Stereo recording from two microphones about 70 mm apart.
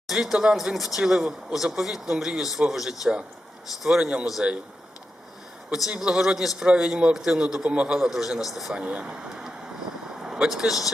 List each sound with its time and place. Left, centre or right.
0.1 s a man's voice: centre
5.7 s a man's voice: centre
7.9 s a man's voice: centre
8.7 s a man's voice: centre
10.2 s speech: centre